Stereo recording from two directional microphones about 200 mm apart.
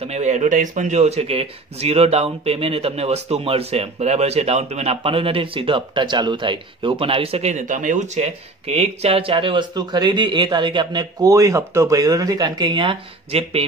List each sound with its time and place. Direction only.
0.0 s speech: 35° right (ahead or behind)